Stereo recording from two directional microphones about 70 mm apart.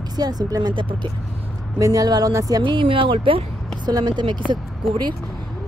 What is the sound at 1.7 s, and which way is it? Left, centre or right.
Speech, right.